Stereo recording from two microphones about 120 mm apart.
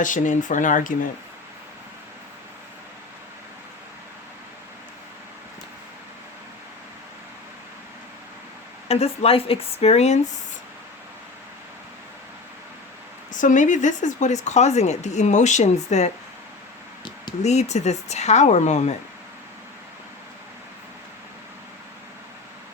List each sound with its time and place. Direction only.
0.0 s speech: 90° left
8.9 s speech: 55° left (ahead or behind)
13.3 s speech: 90° left; by 16.1 s 70° left (ahead or behind)
17.4 s speech: 65° left (ahead or behind)